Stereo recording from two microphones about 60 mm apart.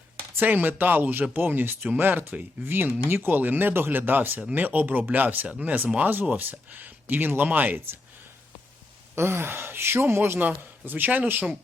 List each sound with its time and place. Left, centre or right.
0.3 s speech: right
9.1 s speech: right
10.8 s speech: right